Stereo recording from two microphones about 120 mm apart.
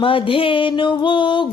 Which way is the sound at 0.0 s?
45° left (ahead or behind).